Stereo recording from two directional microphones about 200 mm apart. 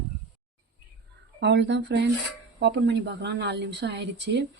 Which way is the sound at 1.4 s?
60° right (ahead or behind).